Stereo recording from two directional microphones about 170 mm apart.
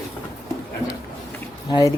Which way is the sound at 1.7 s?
20° left (ahead or behind).